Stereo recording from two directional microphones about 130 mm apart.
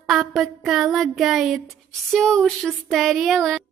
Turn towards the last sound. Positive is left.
turn(degrees=0)  # may be behind; listen again after turning